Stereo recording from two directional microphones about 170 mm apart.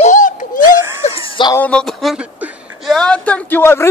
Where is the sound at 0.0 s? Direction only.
50° left (ahead or behind).